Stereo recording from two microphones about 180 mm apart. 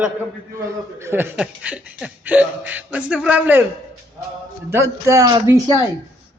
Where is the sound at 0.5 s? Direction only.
15° right (ahead or behind).